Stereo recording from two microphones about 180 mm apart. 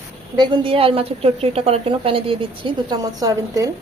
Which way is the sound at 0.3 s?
25° right (ahead or behind).